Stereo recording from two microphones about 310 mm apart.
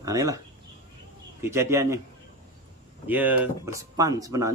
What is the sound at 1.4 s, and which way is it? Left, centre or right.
Speech, centre.